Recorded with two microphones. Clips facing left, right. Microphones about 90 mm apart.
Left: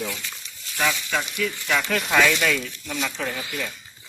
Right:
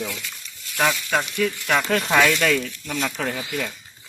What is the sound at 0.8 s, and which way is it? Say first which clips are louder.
Speech: right 3 dB; 50° right (ahead or behind).